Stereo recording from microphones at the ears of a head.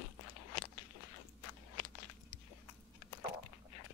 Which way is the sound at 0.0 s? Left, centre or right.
Left.